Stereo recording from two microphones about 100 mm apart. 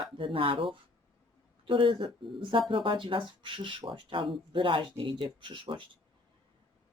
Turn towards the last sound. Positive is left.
turn(degrees=-55)  # may be behind; listen again after turning